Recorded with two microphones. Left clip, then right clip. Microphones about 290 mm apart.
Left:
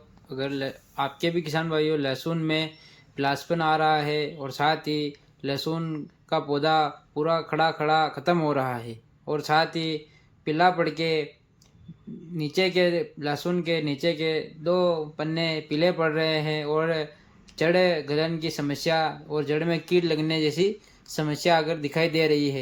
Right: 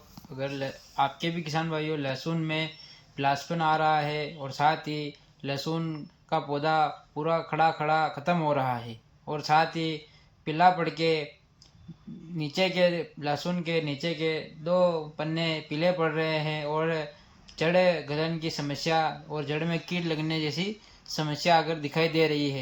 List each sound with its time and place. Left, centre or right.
0.3 s speech: left
12.4 s speech: centre